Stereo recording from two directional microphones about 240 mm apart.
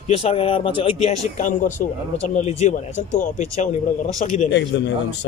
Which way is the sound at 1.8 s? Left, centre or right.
Left.